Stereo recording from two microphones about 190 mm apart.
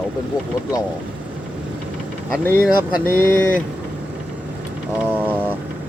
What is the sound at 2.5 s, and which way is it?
Speech, 10° right (ahead or behind).